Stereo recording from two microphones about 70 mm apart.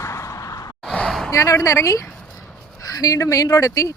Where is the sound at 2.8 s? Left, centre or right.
Left.